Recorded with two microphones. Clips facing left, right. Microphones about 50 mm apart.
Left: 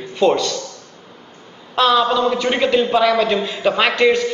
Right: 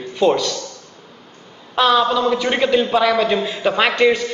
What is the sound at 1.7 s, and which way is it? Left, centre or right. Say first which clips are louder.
A man's voice: even; centre.